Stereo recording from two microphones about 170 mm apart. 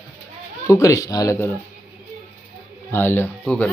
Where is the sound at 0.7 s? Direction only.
20° left (ahead or behind).